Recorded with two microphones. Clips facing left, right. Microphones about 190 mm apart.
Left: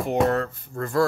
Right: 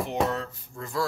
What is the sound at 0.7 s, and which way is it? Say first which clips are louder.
Music: left 8 dB; 55° left (ahead or behind).